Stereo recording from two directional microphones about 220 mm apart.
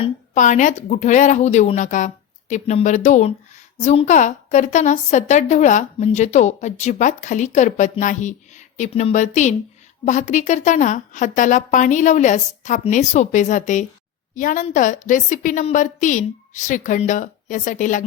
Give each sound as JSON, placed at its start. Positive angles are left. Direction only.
{"t": 0.0, "sound": "a woman's voice", "side_deg": 35}